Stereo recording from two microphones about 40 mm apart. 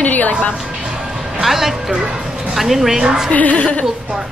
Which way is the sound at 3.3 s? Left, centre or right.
Left.